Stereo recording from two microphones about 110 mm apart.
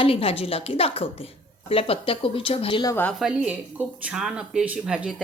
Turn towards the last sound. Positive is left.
turn(degrees=-10)  # may be behind; listen again after turning